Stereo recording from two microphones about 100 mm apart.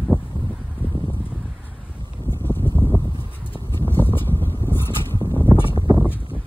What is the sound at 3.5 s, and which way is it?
Horse, 20° left (ahead or behind).